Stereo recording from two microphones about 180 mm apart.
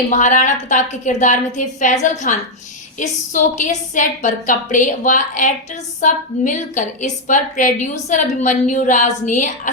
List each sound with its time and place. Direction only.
0.1 s a woman's voice: 45° left (ahead or behind)